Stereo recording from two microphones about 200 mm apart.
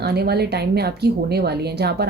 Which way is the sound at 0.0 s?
55° right (ahead or behind).